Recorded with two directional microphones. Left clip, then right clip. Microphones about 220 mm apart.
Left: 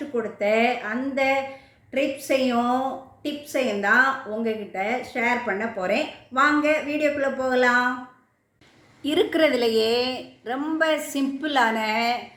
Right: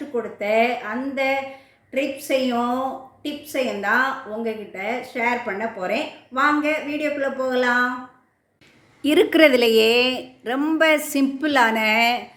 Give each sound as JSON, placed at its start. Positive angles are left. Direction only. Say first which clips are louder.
{"t": 0.1, "sound": "a woman's voice", "louder": "right 1 dB", "side_deg": 0}
{"t": 9.0, "sound": "a woman's voice", "louder": "right 5 dB", "side_deg": -35}